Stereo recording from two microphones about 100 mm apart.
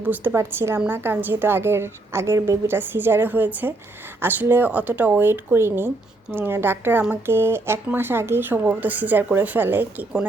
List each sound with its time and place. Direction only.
0.0 s a woman's voice: 20° right (ahead or behind)